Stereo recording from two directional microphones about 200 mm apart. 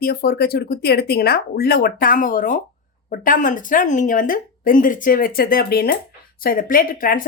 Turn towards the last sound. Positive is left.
turn(degrees=45)  # may be behind; listen again after turning